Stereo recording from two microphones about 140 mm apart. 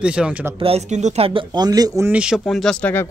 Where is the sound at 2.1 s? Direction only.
5° right (ahead or behind).